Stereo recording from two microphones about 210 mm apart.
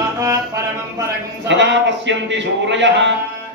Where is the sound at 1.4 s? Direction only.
60° right (ahead or behind).